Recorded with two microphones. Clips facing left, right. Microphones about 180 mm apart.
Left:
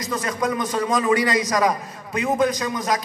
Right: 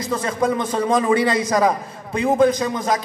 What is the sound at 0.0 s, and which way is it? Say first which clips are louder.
A man's voice: right 3 dB; 30° right (ahead or behind).